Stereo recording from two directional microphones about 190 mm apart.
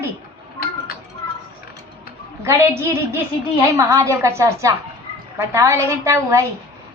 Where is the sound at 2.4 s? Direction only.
15° right (ahead or behind).